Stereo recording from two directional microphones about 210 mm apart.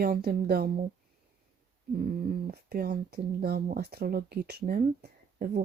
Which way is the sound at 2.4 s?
45° right (ahead or behind).